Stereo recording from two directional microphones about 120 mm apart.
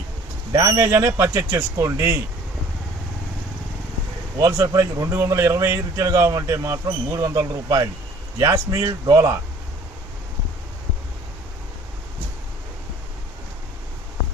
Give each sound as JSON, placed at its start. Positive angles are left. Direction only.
{"t": 0.5, "sound": "speech", "side_deg": -30}
{"t": 4.4, "sound": "speech", "side_deg": -30}